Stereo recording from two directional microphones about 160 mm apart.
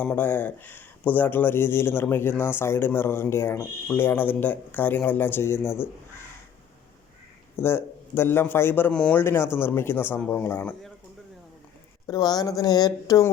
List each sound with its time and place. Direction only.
0.0 s speech: 10° left (ahead or behind)
7.5 s speech: 15° left (ahead or behind)
12.0 s speech: 25° left (ahead or behind)